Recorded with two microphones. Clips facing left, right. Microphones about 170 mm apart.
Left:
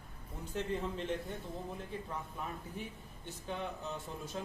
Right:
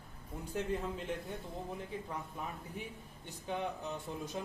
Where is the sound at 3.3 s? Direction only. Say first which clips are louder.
Right 2 dB; 15° right (ahead or behind).